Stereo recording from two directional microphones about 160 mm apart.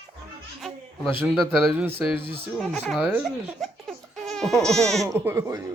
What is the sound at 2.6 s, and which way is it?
Speech, centre (ahead or behind).